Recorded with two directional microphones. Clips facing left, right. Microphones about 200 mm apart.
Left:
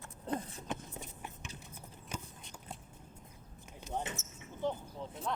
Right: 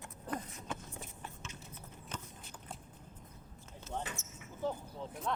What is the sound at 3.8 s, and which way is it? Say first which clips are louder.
Basketball bounce: left 2 dB; 20° left (ahead or behind).